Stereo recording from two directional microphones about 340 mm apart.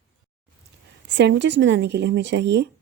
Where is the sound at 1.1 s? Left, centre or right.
Right.